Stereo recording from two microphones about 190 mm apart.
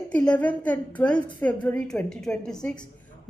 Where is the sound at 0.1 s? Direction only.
5° left (ahead or behind).